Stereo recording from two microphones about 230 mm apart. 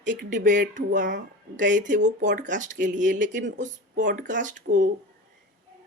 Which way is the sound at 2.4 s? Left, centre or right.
Right.